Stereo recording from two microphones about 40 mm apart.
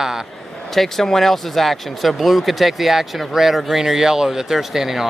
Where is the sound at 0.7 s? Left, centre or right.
Centre.